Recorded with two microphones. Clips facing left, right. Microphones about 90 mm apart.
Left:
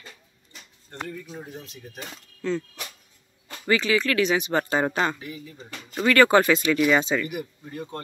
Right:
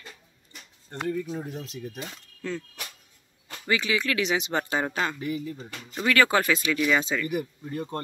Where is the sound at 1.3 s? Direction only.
70° right (ahead or behind).